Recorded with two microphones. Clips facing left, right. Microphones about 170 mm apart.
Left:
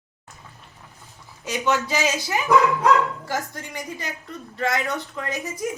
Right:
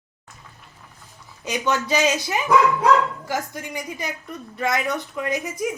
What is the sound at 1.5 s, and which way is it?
A woman's voice, 20° right (ahead or behind).